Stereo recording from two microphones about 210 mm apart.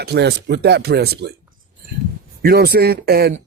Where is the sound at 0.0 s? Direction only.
50° right (ahead or behind).